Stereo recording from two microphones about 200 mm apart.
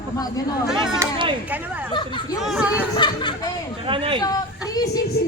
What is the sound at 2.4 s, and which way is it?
Speech, 5° right (ahead or behind).